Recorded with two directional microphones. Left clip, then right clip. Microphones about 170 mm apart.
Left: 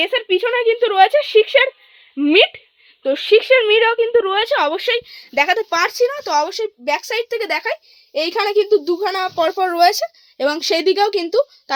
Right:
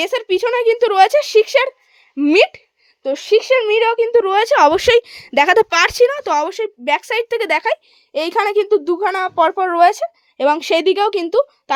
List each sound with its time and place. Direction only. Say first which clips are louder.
0.0 s speech: even; 30° right (ahead or behind)
3.0 s speech: left 1 dB; centre (ahead or behind)
3.8 s speech: right 1 dB; 20° right (ahead or behind)
4.4 s speech: right 5 dB; 35° right (ahead or behind); by 6.1 s 55° right (ahead or behind)
6.1 s speech: right 1 dB; 45° right (ahead or behind); by 8.8 s 30° right (ahead or behind)
9.3 s speech: right 3 dB; 15° right (ahead or behind)
10.3 s speech: right 3 dB; 25° right (ahead or behind)